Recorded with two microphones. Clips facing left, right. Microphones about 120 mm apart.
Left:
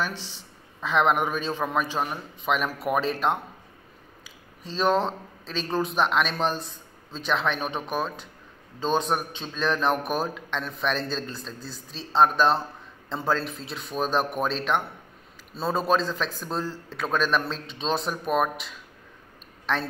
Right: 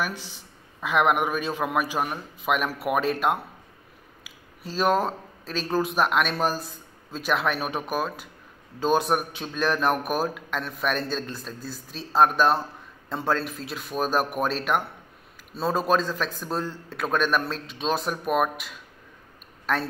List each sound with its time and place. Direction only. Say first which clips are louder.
0.7 s a man's voice: even; 10° right (ahead or behind)
4.6 s a man's voice: even; 10° right (ahead or behind)